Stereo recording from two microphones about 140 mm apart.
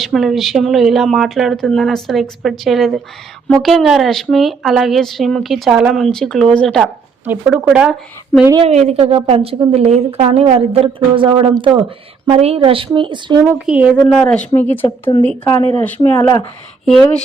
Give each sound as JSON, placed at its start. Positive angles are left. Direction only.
{"t": 0.0, "sound": "a woman's voice", "side_deg": 0}
{"t": 7.3, "sound": "speech", "side_deg": -10}
{"t": 8.6, "sound": "a woman's voice", "side_deg": -50}
{"t": 13.7, "sound": "speech", "side_deg": -10}
{"t": 13.9, "sound": "speech", "side_deg": 10}